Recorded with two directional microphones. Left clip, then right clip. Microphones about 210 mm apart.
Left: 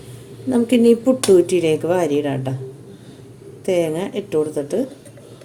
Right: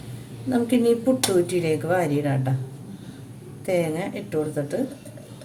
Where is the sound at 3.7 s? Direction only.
25° left (ahead or behind).